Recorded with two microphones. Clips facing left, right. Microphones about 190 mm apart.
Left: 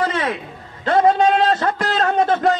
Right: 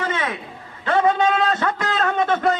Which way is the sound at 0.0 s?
35° left (ahead or behind).